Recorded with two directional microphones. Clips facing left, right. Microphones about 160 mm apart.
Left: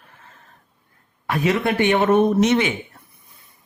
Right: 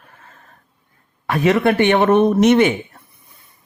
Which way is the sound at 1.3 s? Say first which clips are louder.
Right 5 dB; 55° right (ahead or behind).